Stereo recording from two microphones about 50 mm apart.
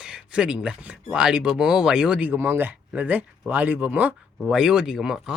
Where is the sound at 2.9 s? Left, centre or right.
Right.